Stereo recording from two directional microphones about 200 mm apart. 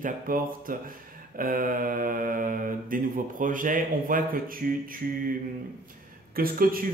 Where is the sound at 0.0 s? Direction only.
45° right (ahead or behind).